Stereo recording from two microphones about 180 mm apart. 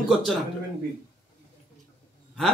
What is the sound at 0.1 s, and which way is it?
Speech, centre (ahead or behind).